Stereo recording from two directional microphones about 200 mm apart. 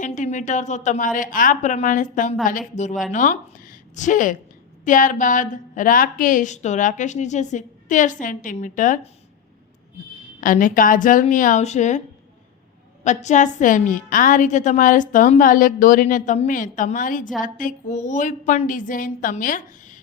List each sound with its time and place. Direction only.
0.0 s a woman's voice: 40° left (ahead or behind)
10.4 s a woman's voice: 40° left (ahead or behind)
13.2 s a woman's voice: 40° left (ahead or behind)